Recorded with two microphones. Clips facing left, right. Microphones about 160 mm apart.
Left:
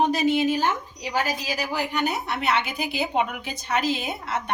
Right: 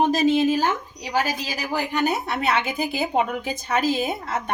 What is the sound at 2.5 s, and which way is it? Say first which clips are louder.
A woman's voice: right 1 dB; 45° right (ahead or behind).